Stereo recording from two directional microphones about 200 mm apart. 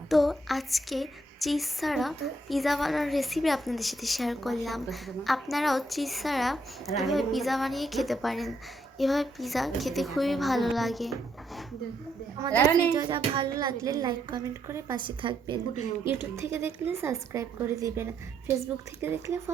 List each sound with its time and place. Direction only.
0.1 s speech: centre (ahead or behind)
12.9 s a woman's voice: 20° right (ahead or behind)
16.3 s speech: 15° right (ahead or behind)